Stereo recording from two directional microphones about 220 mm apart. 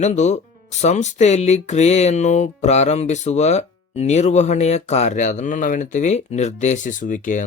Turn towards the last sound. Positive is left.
turn(degrees=35)  # may be behind; listen again after turning